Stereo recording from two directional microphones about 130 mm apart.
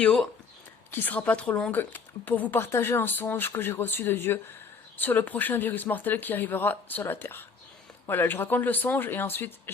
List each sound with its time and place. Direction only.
0.0 s speech: 5° left (ahead or behind)